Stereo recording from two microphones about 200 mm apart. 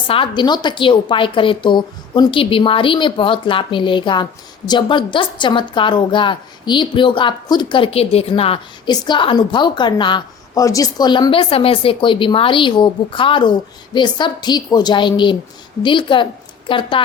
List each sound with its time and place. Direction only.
0.1 s a woman's voice: 25° left (ahead or behind)